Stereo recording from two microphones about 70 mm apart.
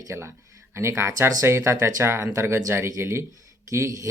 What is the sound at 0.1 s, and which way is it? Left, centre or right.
Speech, right.